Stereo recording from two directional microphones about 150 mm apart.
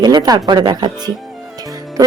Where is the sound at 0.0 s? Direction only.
25° right (ahead or behind).